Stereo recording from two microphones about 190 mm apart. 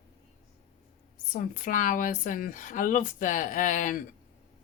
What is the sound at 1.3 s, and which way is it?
Speech, 45° left (ahead or behind).